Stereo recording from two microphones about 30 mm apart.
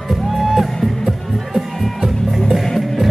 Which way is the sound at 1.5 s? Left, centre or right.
Centre.